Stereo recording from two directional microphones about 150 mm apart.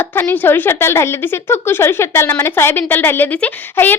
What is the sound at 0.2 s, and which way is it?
A woman's voice, 15° left (ahead or behind).